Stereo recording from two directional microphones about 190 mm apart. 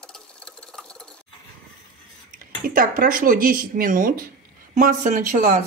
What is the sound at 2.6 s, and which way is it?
Speech, 45° right (ahead or behind).